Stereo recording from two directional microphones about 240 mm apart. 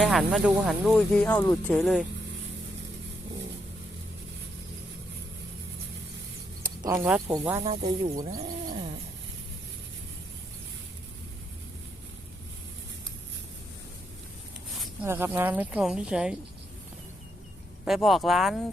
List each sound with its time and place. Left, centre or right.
0.0 s speech: centre
7.0 s speech: centre
7.6 s speech: right
15.0 s speech: centre
17.8 s speech: centre